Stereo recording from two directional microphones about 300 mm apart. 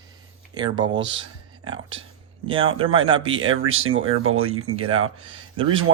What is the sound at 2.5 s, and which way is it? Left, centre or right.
Speech, centre.